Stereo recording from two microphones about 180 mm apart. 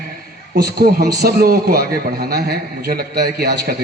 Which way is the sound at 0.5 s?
60° right (ahead or behind).